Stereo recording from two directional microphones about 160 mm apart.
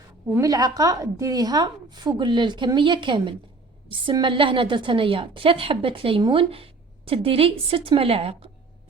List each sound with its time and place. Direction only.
0.3 s a woman's voice: 20° right (ahead or behind); by 8.4 s 35° right (ahead or behind)